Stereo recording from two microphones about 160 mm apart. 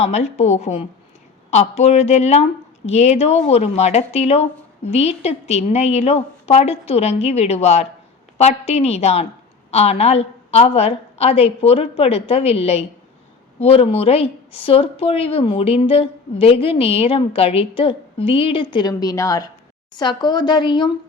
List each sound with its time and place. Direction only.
0.0 s speech: 45° left (ahead or behind)